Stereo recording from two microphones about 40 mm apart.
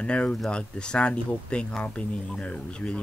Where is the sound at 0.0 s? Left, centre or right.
Left.